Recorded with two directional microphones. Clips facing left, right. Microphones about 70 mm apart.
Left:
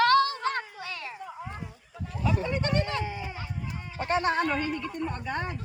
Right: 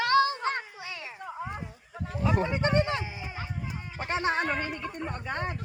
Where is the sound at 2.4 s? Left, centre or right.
Right.